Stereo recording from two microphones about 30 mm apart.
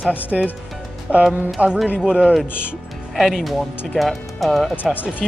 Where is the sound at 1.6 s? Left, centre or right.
Right.